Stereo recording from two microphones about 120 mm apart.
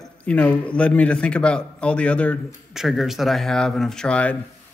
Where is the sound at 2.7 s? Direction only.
Centre (ahead or behind).